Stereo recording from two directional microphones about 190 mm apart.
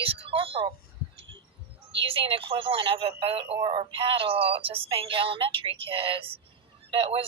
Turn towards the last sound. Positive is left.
turn(degrees=-25)  # may be behind; listen again after turning